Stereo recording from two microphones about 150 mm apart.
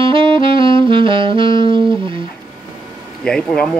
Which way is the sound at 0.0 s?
35° right (ahead or behind).